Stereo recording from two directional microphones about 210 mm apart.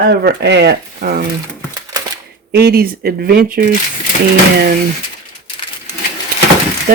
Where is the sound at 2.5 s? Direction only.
45° right (ahead or behind).